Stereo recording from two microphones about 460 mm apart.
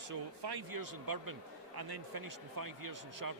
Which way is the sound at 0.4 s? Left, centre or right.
Right.